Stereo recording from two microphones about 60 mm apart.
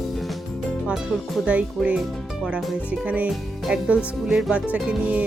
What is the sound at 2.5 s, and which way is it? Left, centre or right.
Speech, right.